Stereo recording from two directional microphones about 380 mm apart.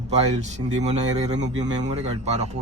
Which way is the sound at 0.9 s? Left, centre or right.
Centre.